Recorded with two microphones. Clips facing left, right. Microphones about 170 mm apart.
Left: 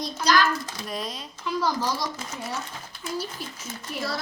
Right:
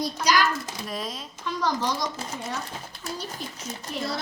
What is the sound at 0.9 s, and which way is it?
Speech, centre (ahead or behind).